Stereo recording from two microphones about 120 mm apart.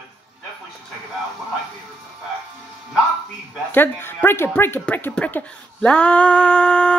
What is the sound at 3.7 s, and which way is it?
Speech, 15° left (ahead or behind).